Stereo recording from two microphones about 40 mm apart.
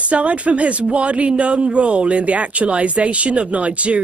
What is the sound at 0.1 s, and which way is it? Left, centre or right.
Speech, right.